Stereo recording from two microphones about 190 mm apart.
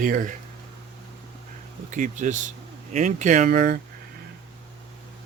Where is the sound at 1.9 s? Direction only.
40° right (ahead or behind).